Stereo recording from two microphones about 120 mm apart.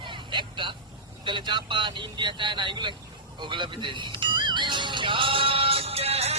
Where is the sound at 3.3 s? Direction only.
40° right (ahead or behind).